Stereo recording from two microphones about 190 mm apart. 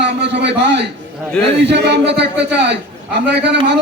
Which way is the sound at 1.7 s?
60° right (ahead or behind).